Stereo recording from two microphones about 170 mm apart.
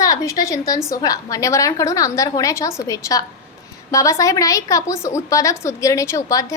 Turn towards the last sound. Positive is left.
turn(degrees=20)  # may be behind; listen again after turning